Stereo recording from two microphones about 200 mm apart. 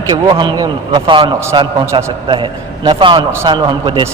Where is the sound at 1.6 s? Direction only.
25° right (ahead or behind).